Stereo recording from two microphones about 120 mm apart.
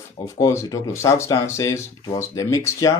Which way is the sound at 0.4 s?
25° left (ahead or behind).